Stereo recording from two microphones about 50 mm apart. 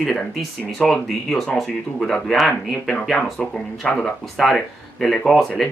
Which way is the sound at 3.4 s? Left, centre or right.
Left.